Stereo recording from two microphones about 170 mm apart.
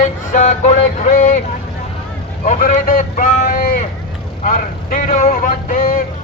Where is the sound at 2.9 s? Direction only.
55° left (ahead or behind).